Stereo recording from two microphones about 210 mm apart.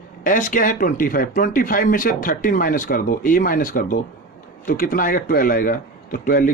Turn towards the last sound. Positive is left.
turn(degrees=40)  # may be behind; listen again after turning